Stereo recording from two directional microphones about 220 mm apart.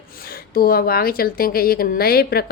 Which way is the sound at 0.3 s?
40° left (ahead or behind).